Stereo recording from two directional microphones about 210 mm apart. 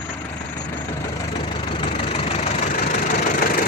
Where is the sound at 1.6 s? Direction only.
25° left (ahead or behind).